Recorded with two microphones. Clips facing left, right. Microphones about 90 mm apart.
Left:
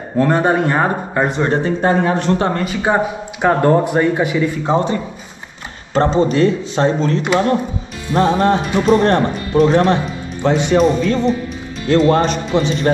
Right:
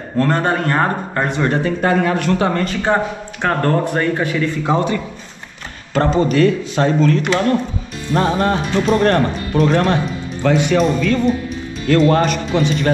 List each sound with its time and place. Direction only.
0.2 s speech: 10° left (ahead or behind)
1.4 s speech: 25° left (ahead or behind)
2.5 s speech: 10° left (ahead or behind)
4.6 s speech: 25° left (ahead or behind)
10.4 s speech: 30° left (ahead or behind)